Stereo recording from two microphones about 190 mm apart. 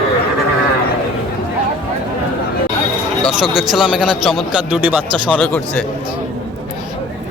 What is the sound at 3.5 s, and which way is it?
A man's voice, centre (ahead or behind).